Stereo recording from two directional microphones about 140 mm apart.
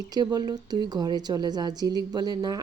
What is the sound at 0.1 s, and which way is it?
Speech, 30° right (ahead or behind).